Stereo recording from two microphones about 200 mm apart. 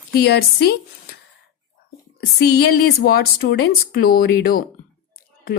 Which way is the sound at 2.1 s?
55° left (ahead or behind).